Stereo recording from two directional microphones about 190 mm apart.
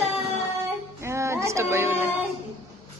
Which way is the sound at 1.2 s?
15° right (ahead or behind).